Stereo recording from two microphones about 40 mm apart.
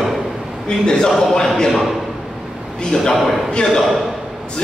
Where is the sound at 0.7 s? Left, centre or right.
Centre.